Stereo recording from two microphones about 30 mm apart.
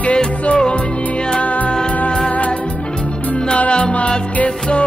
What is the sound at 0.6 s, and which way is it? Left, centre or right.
Music, left.